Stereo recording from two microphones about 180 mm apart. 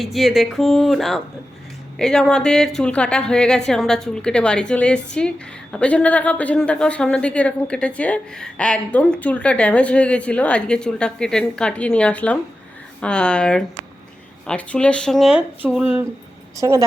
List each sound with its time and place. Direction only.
0.0 s speech: centre (ahead or behind)
16.6 s a woman's voice: 20° right (ahead or behind)